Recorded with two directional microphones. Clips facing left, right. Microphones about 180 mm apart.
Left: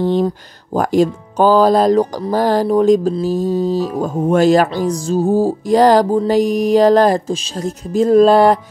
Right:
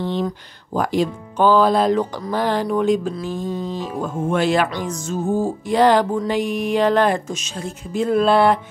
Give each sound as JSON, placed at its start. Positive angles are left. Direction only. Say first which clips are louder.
{"t": 0.0, "sound": "speech", "louder": "left 7 dB", "side_deg": 45}